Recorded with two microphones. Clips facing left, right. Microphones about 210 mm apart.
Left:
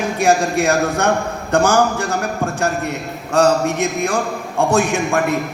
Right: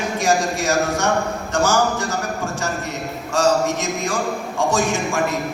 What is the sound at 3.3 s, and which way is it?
A man's voice, 60° left (ahead or behind).